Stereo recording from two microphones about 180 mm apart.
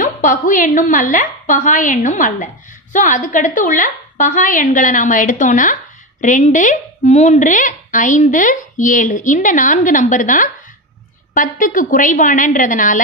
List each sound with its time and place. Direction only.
0.0 s a woman's voice: 45° left (ahead or behind)